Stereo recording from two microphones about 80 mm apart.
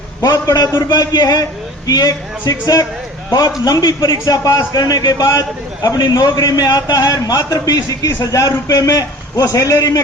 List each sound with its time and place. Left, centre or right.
0.2 s a man's voice: left
0.8 s a man's voice: left